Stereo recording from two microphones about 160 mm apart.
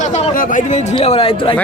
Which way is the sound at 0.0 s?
45° left (ahead or behind).